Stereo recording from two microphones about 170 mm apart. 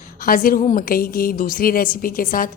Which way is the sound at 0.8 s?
60° left (ahead or behind).